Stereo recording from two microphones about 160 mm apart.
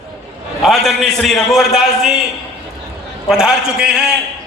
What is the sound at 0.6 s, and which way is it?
A man's voice, centre (ahead or behind).